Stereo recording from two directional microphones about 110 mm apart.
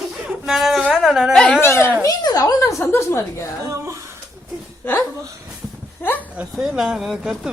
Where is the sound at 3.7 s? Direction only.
25° right (ahead or behind).